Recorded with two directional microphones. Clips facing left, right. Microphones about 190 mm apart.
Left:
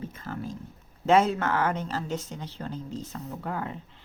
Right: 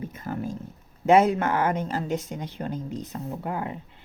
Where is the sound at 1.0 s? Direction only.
10° right (ahead or behind).